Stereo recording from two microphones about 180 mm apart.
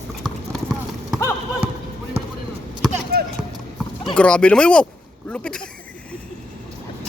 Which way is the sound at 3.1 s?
55° right (ahead or behind).